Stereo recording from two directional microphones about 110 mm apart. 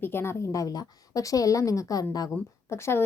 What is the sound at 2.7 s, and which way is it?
Speech, 25° left (ahead or behind).